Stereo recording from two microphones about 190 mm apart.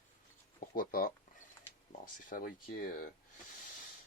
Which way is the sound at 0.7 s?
45° left (ahead or behind).